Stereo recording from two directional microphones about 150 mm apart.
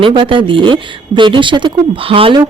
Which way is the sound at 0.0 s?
35° right (ahead or behind).